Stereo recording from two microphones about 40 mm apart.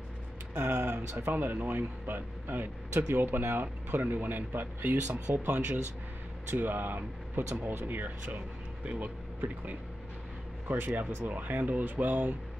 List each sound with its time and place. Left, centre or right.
0.6 s speech: right
3.9 s speech: right
10.7 s speech: right
11.0 s speech: right